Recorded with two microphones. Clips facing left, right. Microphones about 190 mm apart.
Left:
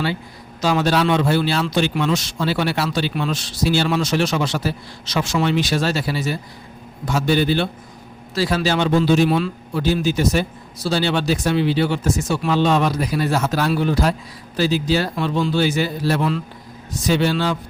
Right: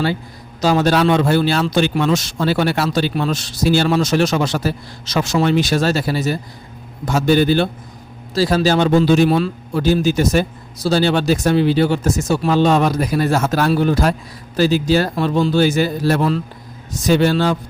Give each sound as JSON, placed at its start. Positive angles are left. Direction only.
{"t": 0.6, "sound": "speech", "side_deg": -40}